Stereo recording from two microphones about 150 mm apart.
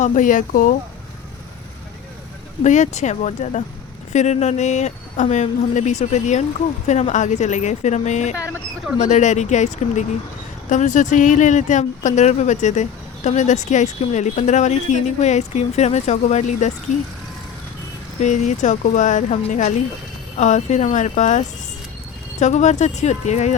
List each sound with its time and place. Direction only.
0.0 s speech: 60° left (ahead or behind)
2.6 s speech: 50° left (ahead or behind)
18.2 s speech: 55° left (ahead or behind)